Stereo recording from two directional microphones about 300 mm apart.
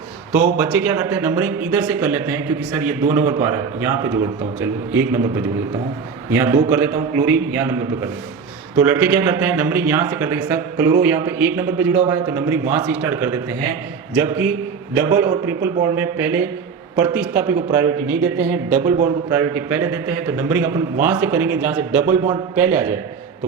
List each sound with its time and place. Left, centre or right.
0.3 s a man's voice: centre